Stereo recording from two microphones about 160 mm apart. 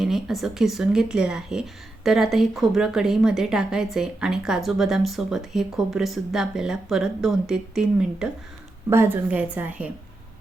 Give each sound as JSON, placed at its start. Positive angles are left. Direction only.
{"t": 0.0, "sound": "speech", "side_deg": 0}
{"t": 8.9, "sound": "a woman's voice", "side_deg": -15}